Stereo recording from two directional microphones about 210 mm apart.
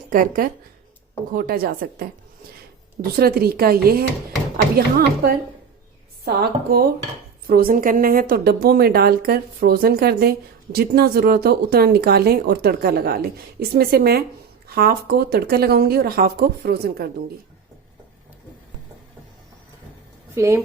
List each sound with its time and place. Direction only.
0.1 s a woman's voice: 40° right (ahead or behind)
3.2 s a woman's voice: 45° right (ahead or behind)
20.3 s a woman's voice: 15° right (ahead or behind)